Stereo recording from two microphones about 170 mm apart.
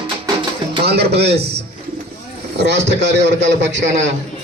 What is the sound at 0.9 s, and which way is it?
Speech, 70° right (ahead or behind).